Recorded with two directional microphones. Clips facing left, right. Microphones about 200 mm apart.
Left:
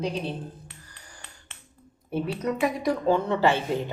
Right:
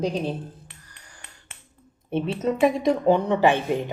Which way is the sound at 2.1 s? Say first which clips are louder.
Right 3 dB; 25° right (ahead or behind).